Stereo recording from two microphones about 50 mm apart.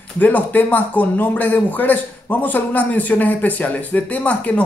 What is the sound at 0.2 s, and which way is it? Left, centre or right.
A man's voice, left.